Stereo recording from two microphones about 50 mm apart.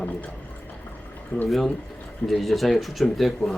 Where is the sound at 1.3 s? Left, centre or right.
Left.